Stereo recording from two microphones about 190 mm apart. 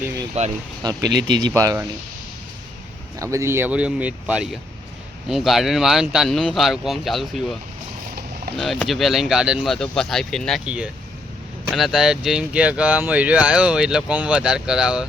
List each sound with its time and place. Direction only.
0.4 s speech: 35° right (ahead or behind)
1.0 s speech: 65° right (ahead or behind)
1.5 s speech: 15° right (ahead or behind)
3.2 s speech: 15° right (ahead or behind); by 7.5 s centre (ahead or behind)
8.5 s speech: centre (ahead or behind)